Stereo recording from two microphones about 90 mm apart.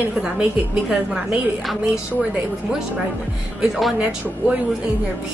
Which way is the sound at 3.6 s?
Centre (ahead or behind).